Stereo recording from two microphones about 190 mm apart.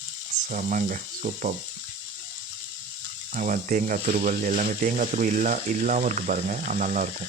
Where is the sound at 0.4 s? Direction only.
45° right (ahead or behind).